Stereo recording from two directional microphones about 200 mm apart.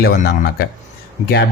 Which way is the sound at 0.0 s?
50° left (ahead or behind).